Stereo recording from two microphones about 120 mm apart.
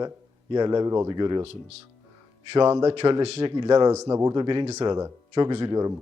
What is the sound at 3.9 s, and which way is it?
Speech, 25° right (ahead or behind).